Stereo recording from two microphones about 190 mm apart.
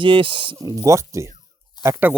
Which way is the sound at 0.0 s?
25° right (ahead or behind).